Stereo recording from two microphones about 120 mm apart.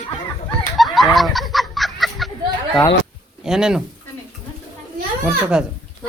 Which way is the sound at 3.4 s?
5° right (ahead or behind).